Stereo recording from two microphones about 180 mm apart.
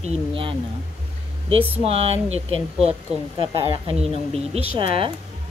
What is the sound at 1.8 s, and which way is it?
Speech, 35° right (ahead or behind).